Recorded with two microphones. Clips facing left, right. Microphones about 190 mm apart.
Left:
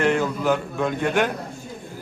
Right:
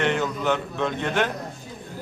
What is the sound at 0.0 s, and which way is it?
Speech, centre (ahead or behind).